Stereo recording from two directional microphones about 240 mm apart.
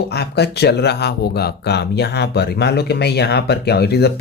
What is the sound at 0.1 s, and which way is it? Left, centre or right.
Speech, left.